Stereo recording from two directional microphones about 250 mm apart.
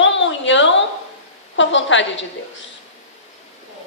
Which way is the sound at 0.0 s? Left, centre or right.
Left.